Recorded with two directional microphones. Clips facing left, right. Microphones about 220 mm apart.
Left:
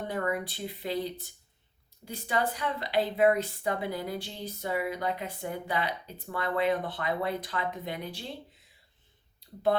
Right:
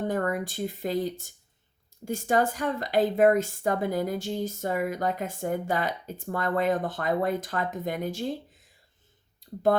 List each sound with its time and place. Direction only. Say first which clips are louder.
0.1 s a woman's voice: right 3 dB; 45° right (ahead or behind)